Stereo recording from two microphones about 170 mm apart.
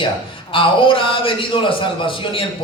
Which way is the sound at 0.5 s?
30° left (ahead or behind).